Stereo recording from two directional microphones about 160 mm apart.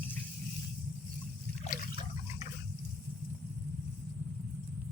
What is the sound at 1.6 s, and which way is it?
Trickle, 60° left (ahead or behind).